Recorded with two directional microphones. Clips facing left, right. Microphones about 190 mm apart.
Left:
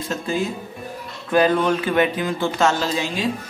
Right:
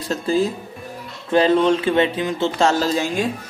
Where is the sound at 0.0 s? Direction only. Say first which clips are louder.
Right 4 dB; 35° right (ahead or behind).